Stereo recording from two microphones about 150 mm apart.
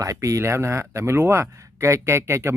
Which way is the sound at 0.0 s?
20° right (ahead or behind).